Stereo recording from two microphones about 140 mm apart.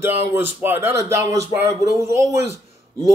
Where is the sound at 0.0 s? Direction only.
15° right (ahead or behind).